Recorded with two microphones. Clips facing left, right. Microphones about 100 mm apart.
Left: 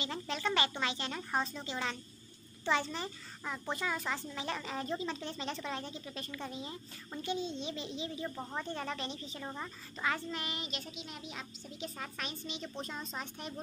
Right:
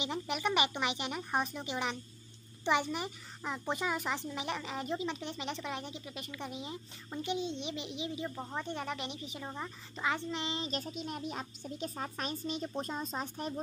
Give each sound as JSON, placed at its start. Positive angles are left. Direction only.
{"t": 0.0, "sound": "a child's voice", "side_deg": -15}
{"t": 8.4, "sound": "speech", "side_deg": -5}
{"t": 8.6, "sound": "a child's voice", "side_deg": -15}
{"t": 9.4, "sound": "speech", "side_deg": -5}
{"t": 9.9, "sound": "a child's voice", "side_deg": -20}
{"t": 10.7, "sound": "speech", "side_deg": -45}